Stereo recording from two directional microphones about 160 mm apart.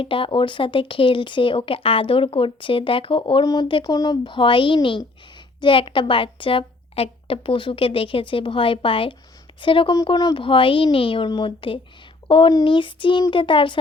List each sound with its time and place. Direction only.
0.0 s speech: 35° left (ahead or behind)